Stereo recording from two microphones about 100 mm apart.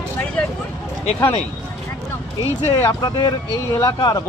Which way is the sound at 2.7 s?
45° left (ahead or behind).